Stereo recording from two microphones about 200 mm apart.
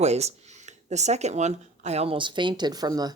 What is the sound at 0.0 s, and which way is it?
Speech, 35° right (ahead or behind).